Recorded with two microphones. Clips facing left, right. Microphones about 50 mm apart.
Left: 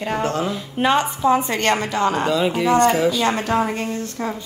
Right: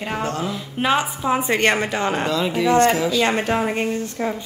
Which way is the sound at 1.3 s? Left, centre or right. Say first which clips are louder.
Even; centre.